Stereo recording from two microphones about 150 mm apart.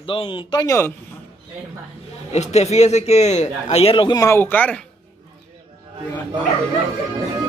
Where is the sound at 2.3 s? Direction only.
50° left (ahead or behind); by 4.8 s 10° left (ahead or behind).